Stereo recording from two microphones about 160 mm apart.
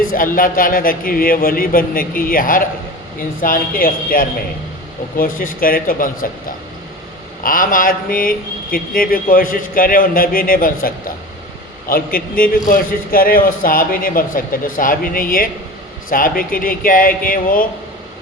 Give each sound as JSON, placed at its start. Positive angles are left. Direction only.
{"t": 0.3, "sound": "a man's voice", "side_deg": 60}
{"t": 7.4, "sound": "a man's voice", "side_deg": 60}